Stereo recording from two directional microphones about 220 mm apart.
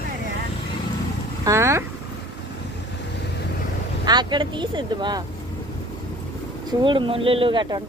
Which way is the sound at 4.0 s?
20° right (ahead or behind).